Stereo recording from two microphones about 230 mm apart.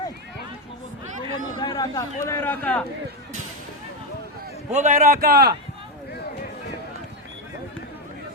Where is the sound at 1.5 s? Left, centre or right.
Centre.